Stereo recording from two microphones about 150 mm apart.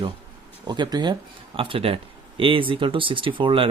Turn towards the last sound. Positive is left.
turn(degrees=-35)  # may be behind; listen again after turning